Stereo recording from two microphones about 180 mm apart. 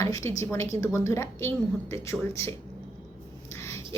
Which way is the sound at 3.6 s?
15° left (ahead or behind).